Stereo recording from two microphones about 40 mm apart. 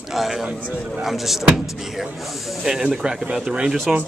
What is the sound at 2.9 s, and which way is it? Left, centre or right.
Speech, right.